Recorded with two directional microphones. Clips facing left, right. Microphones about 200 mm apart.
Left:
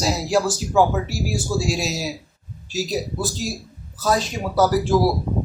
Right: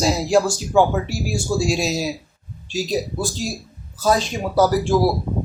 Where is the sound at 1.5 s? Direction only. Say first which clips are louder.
Right 4 dB; 5° left (ahead or behind).